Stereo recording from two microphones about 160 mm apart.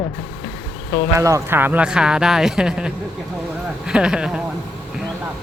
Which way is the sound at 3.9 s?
5° right (ahead or behind).